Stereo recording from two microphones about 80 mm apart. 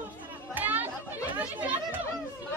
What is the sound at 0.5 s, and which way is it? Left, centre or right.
Chatter, right.